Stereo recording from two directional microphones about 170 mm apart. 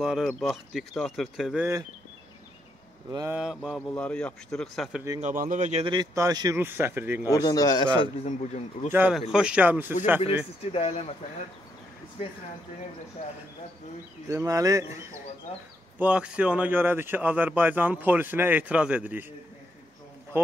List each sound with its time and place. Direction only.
0.0 s speech: centre (ahead or behind)
3.1 s mantra: 20° right (ahead or behind)
3.3 s speech: 5° right (ahead or behind)
5.2 s a man's voice: 50° right (ahead or behind)
5.9 s a man's voice: 20° right (ahead or behind)
7.2 s speech: 20° left (ahead or behind)
8.0 s a man's voice: 40° left (ahead or behind)
8.9 s a man's voice: 10° right (ahead or behind)
10.7 s a man's voice: 35° left (ahead or behind)
14.3 s a man's voice: 20° right (ahead or behind)
16.0 s a man's voice: 5° right (ahead or behind)